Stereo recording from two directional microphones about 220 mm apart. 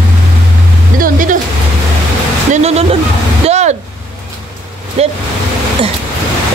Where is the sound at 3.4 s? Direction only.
30° right (ahead or behind).